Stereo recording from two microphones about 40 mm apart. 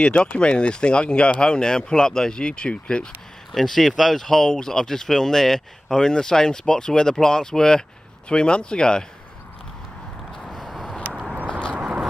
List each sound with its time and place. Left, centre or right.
0.0 s speech: left
3.5 s speech: centre
10.4 s a sound: centre